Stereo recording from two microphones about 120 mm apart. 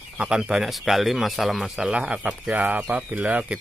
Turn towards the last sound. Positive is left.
turn(degrees=-10)  # may be behind; listen again after turning